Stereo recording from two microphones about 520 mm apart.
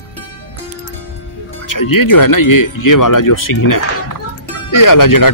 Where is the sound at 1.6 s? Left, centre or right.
Left.